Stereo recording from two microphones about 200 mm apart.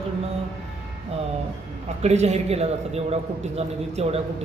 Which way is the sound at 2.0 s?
35° right (ahead or behind).